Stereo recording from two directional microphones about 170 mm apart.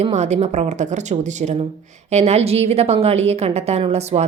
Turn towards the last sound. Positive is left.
turn(degrees=-40)  # may be behind; listen again after turning